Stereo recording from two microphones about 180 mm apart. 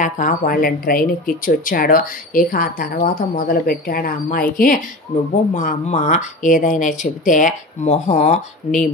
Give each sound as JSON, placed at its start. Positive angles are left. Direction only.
{"t": 0.0, "sound": "speech", "side_deg": 50}